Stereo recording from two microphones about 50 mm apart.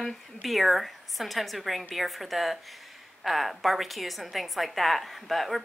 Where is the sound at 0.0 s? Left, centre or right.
Centre.